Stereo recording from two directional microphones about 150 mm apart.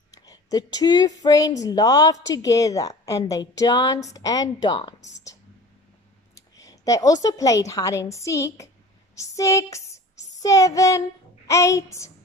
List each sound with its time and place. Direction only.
0.1 s a woman's voice: 25° left (ahead or behind)
6.3 s a woman's voice: 20° left (ahead or behind)